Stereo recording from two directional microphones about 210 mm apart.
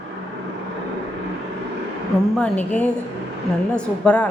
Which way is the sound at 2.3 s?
5° left (ahead or behind).